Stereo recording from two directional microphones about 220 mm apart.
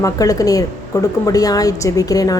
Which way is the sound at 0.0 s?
15° left (ahead or behind).